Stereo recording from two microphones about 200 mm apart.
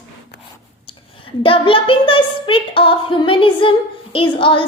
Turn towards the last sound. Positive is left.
turn(degrees=25)  # may be behind; listen again after turning